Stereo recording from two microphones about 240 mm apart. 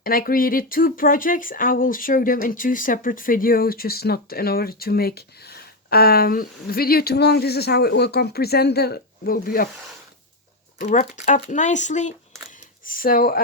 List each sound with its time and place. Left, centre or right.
0.0 s speech: left
10.8 s speech: left